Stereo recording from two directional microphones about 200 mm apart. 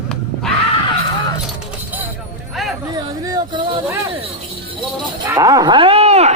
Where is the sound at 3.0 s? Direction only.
20° right (ahead or behind).